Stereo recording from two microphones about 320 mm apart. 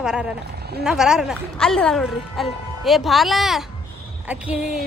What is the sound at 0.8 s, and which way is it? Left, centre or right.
Speech, centre.